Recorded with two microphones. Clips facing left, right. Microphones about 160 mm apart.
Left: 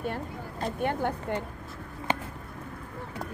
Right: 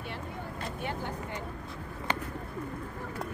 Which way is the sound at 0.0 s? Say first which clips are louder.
Left 5 dB; 45° left (ahead or behind).